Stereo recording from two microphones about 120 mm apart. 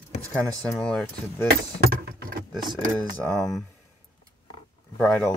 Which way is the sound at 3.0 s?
5° left (ahead or behind).